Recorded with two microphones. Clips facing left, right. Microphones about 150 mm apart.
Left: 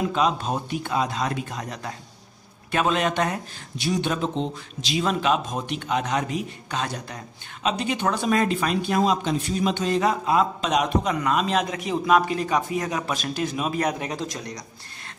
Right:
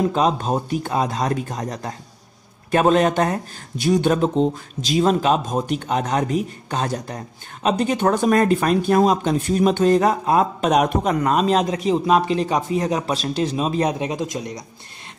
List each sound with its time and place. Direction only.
0.0 s speech: 40° right (ahead or behind); by 14.6 s 20° right (ahead or behind)